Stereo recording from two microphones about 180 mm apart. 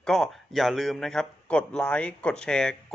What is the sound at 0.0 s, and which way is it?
A man's voice, centre (ahead or behind).